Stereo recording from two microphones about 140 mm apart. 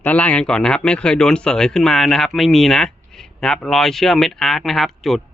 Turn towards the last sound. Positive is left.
turn(degrees=0)  # may be behind; listen again after turning